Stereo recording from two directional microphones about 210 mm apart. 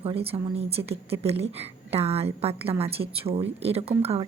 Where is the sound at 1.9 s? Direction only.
30° right (ahead or behind).